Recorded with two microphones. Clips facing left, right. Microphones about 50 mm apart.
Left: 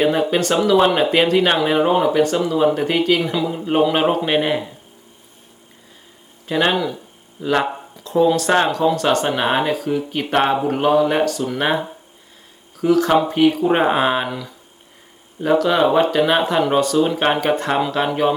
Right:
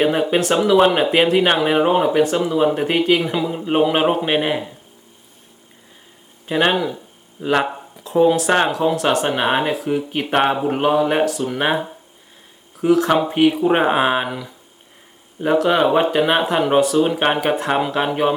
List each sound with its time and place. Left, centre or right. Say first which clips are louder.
0.0 s speech: even; centre
6.5 s speech: right 1 dB; centre
7.9 s a sound: right 1 dB; centre
8.2 s speech: even; centre
9.7 s speech: even; centre
12.7 s speech: even; centre
13.3 s speech: even; centre